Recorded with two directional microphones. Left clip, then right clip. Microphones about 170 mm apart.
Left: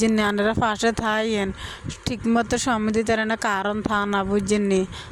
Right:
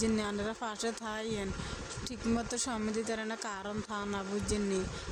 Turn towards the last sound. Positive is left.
turn(degrees=55)  # may be behind; listen again after turning